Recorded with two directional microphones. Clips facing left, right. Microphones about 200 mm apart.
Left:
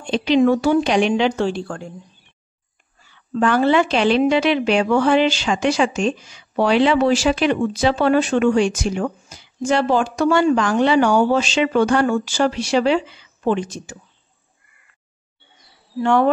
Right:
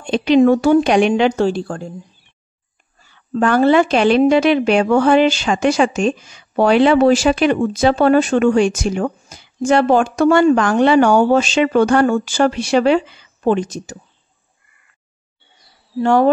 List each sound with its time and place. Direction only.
0.0 s a woman's voice: 50° right (ahead or behind)
3.0 s a woman's voice: 45° right (ahead or behind)
16.0 s speech: 40° right (ahead or behind)